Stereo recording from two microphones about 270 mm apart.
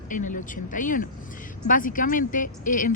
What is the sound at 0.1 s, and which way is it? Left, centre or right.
A woman's voice, left.